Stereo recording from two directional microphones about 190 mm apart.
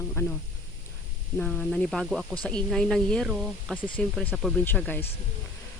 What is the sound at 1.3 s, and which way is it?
Speech, 5° left (ahead or behind).